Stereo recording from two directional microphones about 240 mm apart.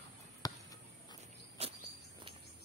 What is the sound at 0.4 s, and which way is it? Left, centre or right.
Basketball bounce, centre.